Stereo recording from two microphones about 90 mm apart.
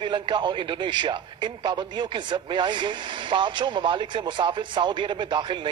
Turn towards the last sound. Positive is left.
turn(degrees=-60)  # may be behind; listen again after turning